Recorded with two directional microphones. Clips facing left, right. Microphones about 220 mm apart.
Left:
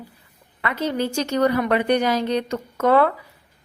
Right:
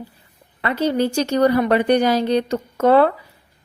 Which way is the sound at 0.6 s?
35° right (ahead or behind).